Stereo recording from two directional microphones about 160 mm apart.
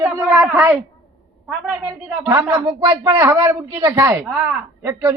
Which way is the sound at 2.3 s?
20° right (ahead or behind).